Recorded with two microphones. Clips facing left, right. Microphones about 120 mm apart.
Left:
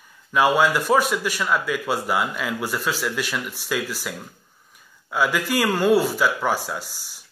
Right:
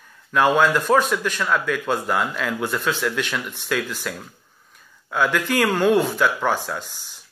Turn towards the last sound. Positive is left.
turn(degrees=5)  # may be behind; listen again after turning